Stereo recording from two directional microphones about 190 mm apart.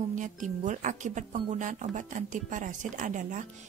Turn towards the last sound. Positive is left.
turn(degrees=-40)  # may be behind; listen again after turning